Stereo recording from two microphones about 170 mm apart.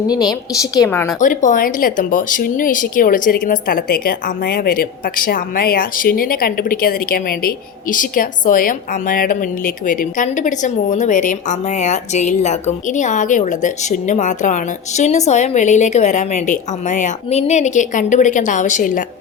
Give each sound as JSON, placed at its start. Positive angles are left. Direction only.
{"t": 0.6, "sound": "speech", "side_deg": 15}
{"t": 1.2, "sound": "speech", "side_deg": 50}